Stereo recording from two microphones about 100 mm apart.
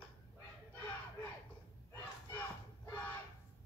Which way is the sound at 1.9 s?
20° left (ahead or behind).